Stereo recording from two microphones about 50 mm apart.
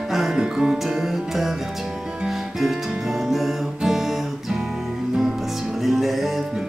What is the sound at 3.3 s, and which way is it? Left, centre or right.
Guitar, centre.